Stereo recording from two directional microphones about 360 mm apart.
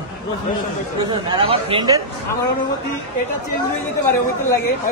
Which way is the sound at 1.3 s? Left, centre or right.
Centre.